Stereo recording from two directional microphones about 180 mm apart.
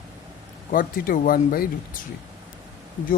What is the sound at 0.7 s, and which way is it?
Speech, 50° left (ahead or behind).